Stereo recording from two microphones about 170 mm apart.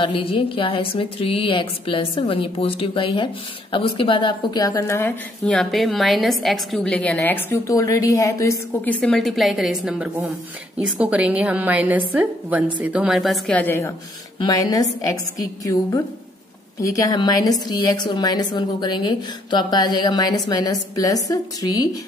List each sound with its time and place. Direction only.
0.0 s a woman's voice: 30° left (ahead or behind); by 5.1 s 15° left (ahead or behind)
5.4 s a woman's voice: centre (ahead or behind); by 21.8 s 20° left (ahead or behind)